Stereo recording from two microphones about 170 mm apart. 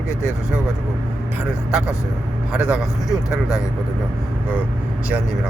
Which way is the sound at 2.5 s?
5° right (ahead or behind).